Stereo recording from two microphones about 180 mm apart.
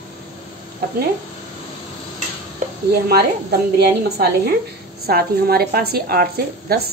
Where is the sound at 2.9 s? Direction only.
60° right (ahead or behind).